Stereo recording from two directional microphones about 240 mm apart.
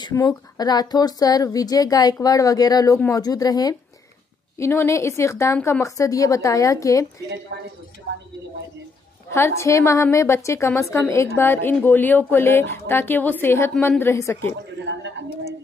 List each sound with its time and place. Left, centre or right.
0.0 s a woman's voice: centre
9.3 s a woman's voice: centre
14.9 s a sound: right